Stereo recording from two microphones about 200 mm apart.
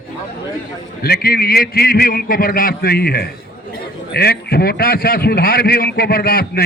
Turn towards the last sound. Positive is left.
turn(degrees=50)  # may be behind; listen again after turning